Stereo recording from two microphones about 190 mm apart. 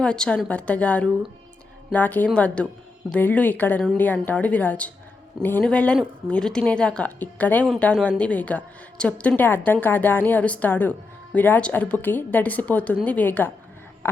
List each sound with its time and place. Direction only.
0.0 s speech: 5° left (ahead or behind)